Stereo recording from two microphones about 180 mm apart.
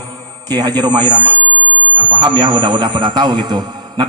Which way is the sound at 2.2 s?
25° right (ahead or behind).